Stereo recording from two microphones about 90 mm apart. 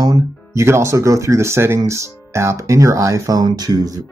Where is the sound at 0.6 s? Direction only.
30° right (ahead or behind).